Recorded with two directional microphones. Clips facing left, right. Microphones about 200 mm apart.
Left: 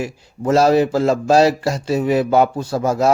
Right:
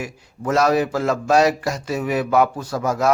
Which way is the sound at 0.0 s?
30° left (ahead or behind).